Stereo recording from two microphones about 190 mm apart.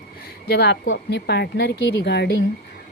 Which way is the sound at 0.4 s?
60° left (ahead or behind).